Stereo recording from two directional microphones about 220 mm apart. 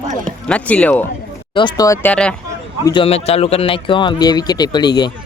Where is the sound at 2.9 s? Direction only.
25° left (ahead or behind).